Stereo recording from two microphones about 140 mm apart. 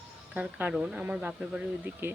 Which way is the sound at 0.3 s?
10° right (ahead or behind).